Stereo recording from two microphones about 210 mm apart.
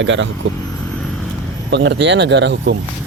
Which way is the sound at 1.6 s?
60° right (ahead or behind).